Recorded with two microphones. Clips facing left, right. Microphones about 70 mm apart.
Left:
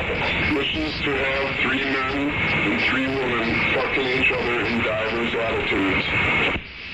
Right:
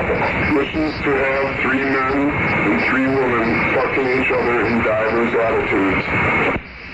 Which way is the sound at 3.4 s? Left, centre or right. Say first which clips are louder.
Right 6 dB; right.